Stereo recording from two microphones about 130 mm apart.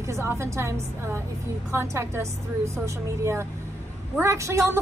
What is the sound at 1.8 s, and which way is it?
A woman's voice, 20° right (ahead or behind).